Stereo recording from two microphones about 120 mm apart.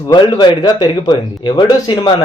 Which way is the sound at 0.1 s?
35° left (ahead or behind).